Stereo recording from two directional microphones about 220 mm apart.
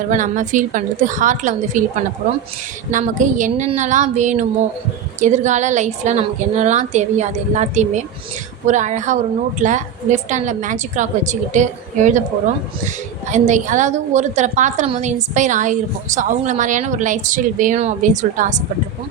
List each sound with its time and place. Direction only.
0.1 s a woman's voice: 35° right (ahead or behind)
2.9 s a woman's voice: 35° right (ahead or behind)
13.3 s a woman's voice: 35° right (ahead or behind)